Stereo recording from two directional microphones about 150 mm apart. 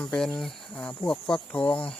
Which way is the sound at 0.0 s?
5° left (ahead or behind).